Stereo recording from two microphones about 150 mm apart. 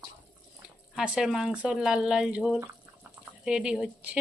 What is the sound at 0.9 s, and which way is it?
A woman's voice, 5° right (ahead or behind).